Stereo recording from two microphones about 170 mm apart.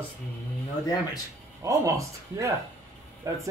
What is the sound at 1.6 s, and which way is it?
Speech, 15° right (ahead or behind).